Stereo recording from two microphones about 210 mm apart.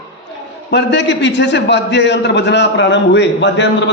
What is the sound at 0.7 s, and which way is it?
A man's voice, 55° left (ahead or behind).